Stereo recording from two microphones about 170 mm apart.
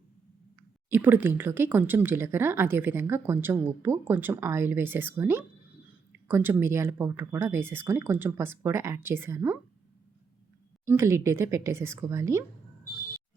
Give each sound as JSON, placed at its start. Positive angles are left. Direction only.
{"t": 0.9, "sound": "speech", "side_deg": -10}
{"t": 10.8, "sound": "speech", "side_deg": -15}